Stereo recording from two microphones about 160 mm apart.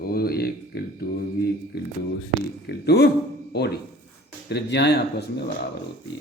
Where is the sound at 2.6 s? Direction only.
90° left.